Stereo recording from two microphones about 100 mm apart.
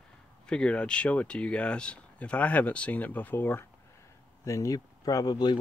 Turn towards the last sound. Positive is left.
turn(degrees=45)  # may be behind; listen again after turning